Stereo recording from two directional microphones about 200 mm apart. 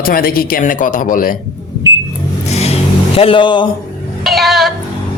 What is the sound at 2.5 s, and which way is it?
Vehicle, 30° left (ahead or behind).